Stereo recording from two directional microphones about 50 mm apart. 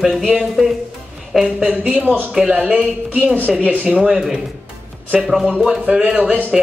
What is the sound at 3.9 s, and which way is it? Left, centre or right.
Speech, centre.